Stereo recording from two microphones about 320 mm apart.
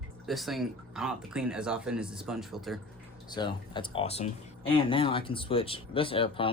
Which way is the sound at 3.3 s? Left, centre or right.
Centre.